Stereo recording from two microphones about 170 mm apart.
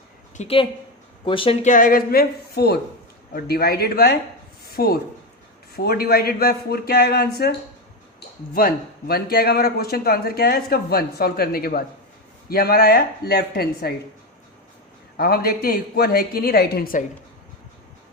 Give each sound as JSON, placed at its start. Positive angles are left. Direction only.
{"t": 0.3, "sound": "speech", "side_deg": 35}
{"t": 1.6, "sound": "speech", "side_deg": 50}
{"t": 4.6, "sound": "a sound", "side_deg": 65}
{"t": 5.7, "sound": "speech", "side_deg": 65}
{"t": 8.5, "sound": "speech", "side_deg": 60}
{"t": 15.2, "sound": "speech", "side_deg": 60}